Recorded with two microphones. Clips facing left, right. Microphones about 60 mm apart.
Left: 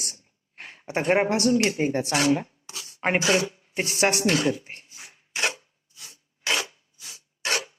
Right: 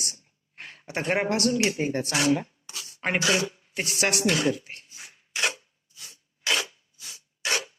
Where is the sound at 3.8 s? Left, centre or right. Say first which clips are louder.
Left 3 dB; left.